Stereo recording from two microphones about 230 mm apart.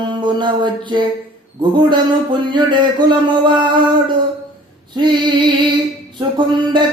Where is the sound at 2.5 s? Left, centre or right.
Centre.